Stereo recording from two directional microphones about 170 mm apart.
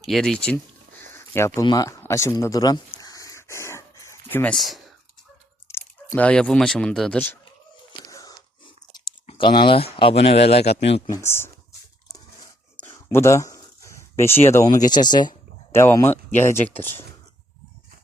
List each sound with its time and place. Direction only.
0.0 s a sound: centre (ahead or behind)
1.6 s speech: 20° left (ahead or behind)
3.0 s pant: 20° left (ahead or behind); by 4.8 s centre (ahead or behind)
5.6 s speech: 15° left (ahead or behind)
8.1 s chewing: 20° left (ahead or behind)
9.2 s speech: 30° left (ahead or behind)
11.1 s speech: 15° left (ahead or behind)
12.8 s a sound: 15° left (ahead or behind)
15.7 s speech: 15° left (ahead or behind)